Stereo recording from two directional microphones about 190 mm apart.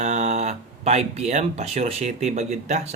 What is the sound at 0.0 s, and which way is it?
Speech, 35° right (ahead or behind).